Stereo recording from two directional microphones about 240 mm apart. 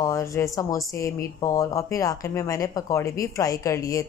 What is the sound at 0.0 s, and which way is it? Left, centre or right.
Speech, centre.